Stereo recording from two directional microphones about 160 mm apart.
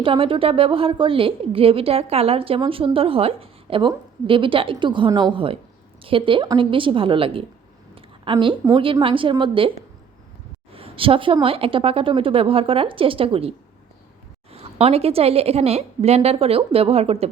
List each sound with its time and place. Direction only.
0.0 s a woman's voice: 35° right (ahead or behind)
7.9 s a sound: 30° right (ahead or behind)
8.7 s a woman's voice: 35° right (ahead or behind)
10.8 s a woman's voice: 35° right (ahead or behind)
14.5 s a woman's voice: 40° right (ahead or behind)